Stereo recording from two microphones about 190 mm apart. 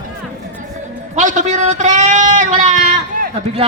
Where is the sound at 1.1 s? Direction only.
40° right (ahead or behind).